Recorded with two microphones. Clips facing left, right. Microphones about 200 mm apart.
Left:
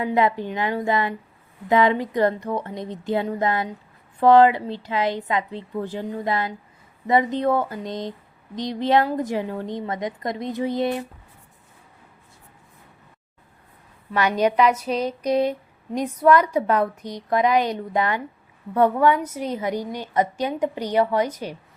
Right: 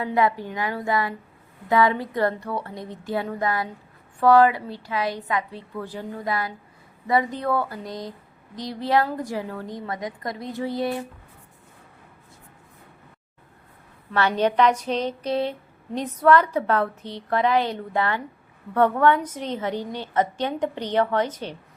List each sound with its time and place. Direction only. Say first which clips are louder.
0.0 s a woman's voice: left 2 dB; 20° left (ahead or behind)
14.1 s a woman's voice: left 1 dB; 15° left (ahead or behind)